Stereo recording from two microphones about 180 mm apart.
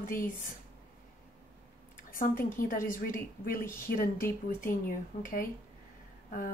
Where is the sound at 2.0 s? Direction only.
50° left (ahead or behind).